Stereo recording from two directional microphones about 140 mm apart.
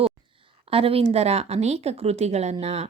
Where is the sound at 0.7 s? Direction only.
45° right (ahead or behind).